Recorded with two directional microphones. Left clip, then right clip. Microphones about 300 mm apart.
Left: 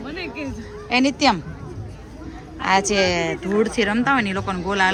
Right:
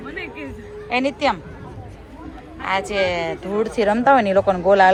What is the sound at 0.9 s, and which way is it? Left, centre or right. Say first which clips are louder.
Speech: left 2 dB; centre.